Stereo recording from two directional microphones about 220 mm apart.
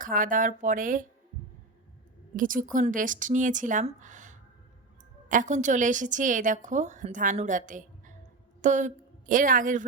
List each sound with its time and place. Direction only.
0.0 s a woman's voice: 35° right (ahead or behind)
2.3 s a woman's voice: 35° right (ahead or behind)